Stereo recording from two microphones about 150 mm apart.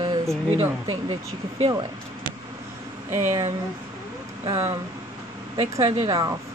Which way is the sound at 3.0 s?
15° right (ahead or behind).